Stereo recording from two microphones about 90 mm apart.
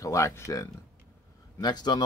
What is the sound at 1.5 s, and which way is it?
Speech, 50° left (ahead or behind).